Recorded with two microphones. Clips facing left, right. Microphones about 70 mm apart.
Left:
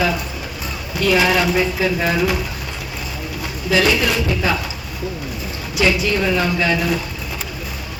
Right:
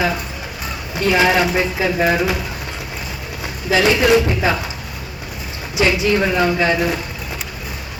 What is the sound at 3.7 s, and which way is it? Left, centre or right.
Speech, right.